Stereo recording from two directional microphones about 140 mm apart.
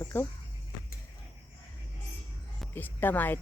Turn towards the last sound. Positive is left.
turn(degrees=15)  # may be behind; listen again after turning